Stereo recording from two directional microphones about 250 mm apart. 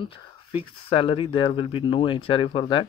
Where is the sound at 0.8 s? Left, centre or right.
Left.